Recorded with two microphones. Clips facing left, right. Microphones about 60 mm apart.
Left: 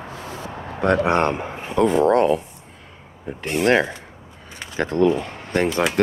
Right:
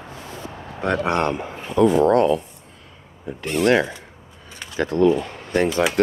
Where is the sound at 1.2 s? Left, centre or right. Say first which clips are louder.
Left 1 dB; left.